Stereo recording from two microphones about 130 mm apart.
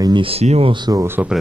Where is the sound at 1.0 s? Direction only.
15° right (ahead or behind).